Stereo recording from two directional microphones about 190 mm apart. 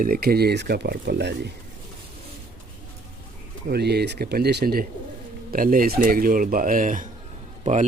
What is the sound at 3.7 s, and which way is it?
Speech, 60° right (ahead or behind).